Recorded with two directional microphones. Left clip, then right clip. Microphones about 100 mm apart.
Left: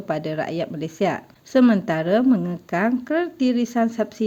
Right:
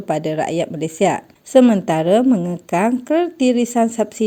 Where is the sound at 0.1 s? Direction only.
45° right (ahead or behind).